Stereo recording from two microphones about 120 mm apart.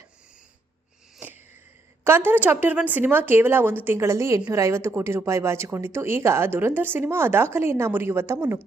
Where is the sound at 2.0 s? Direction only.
20° right (ahead or behind).